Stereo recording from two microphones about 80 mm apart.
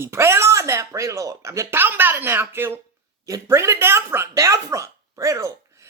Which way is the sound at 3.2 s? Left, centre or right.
Right.